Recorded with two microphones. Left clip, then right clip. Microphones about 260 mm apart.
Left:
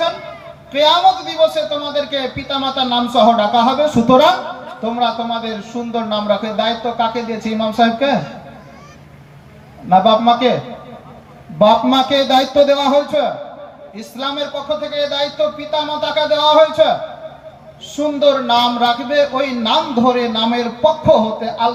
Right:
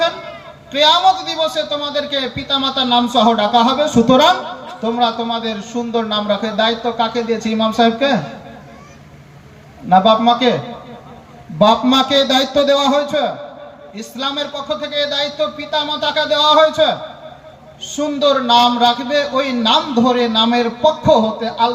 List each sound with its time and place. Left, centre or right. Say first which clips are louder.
0.7 s a man's voice: even; right
9.9 s a man's voice: even; right
11.6 s a man's voice: left 1 dB; right